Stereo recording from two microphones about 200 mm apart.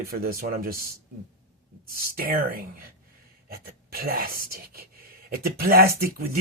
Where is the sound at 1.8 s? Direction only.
45° right (ahead or behind).